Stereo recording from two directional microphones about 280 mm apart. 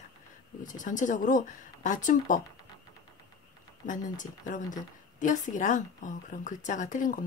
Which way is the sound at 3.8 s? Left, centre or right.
Left.